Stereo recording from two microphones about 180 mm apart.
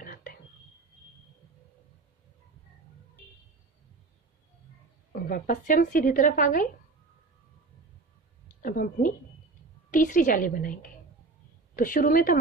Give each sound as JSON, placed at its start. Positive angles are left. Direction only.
{"t": 0.0, "sound": "whispering", "side_deg": 50}
{"t": 5.2, "sound": "a woman's voice", "side_deg": 50}
{"t": 8.6, "sound": "a woman's voice", "side_deg": 50}